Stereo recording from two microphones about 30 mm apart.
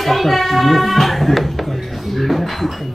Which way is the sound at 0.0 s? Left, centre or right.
Centre.